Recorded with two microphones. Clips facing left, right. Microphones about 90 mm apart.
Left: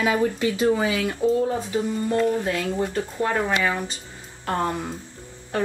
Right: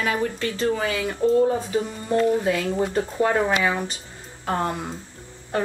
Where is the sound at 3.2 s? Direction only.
25° right (ahead or behind).